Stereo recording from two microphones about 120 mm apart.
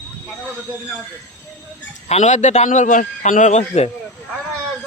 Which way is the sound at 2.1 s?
75° left (ahead or behind).